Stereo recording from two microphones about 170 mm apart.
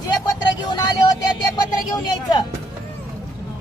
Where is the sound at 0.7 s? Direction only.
25° left (ahead or behind).